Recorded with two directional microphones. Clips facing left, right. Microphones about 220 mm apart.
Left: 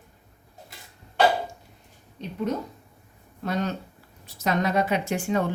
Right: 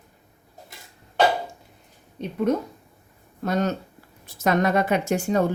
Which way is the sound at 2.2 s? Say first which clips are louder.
Right 5 dB; 50° right (ahead or behind).